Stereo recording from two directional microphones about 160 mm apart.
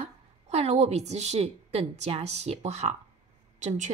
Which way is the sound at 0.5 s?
45° right (ahead or behind).